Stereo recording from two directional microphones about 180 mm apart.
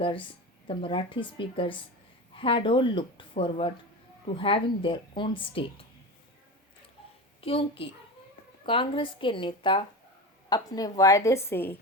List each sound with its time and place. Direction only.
0.0 s a woman's voice: 30° left (ahead or behind)
7.4 s a child's voice: 30° left (ahead or behind); by 11.8 s 10° left (ahead or behind)